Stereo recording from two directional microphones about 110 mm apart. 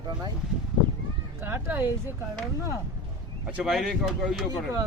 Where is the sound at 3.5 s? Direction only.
5° right (ahead or behind).